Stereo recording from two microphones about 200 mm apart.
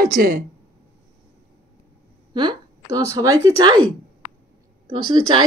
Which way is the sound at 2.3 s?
20° right (ahead or behind).